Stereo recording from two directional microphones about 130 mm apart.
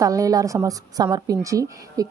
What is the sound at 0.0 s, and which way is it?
A woman's voice, 25° right (ahead or behind).